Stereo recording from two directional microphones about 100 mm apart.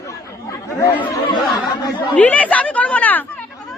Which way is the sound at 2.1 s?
15° left (ahead or behind).